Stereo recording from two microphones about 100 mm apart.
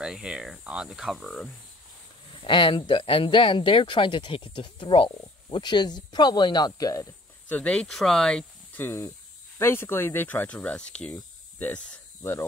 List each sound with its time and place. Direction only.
0.0 s speech: 10° right (ahead or behind)
2.4 s speech: 55° left (ahead or behind); by 7.1 s 35° left (ahead or behind)
7.4 s speech: 15° left (ahead or behind)
8.7 s speech: 25° left (ahead or behind)